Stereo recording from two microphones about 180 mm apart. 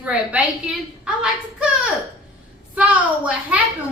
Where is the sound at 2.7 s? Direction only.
5° right (ahead or behind).